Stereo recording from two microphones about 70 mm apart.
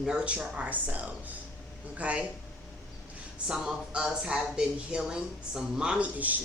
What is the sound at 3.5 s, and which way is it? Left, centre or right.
Speech, centre.